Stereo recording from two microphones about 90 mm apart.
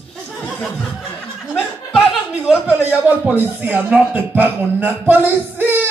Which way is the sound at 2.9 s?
15° right (ahead or behind).